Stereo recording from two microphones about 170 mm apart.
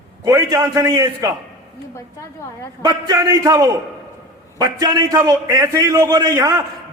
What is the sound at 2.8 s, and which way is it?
A man's voice, 20° right (ahead or behind).